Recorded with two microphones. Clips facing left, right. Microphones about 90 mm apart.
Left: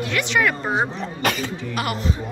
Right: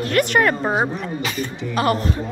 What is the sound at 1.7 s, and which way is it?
Speech, 35° right (ahead or behind).